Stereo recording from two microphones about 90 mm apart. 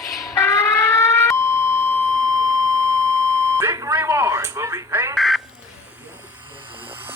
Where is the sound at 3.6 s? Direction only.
35° right (ahead or behind).